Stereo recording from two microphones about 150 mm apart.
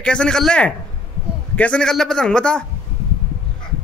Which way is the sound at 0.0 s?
5° left (ahead or behind).